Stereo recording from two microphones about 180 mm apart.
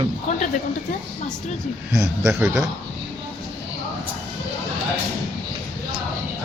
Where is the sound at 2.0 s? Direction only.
15° right (ahead or behind).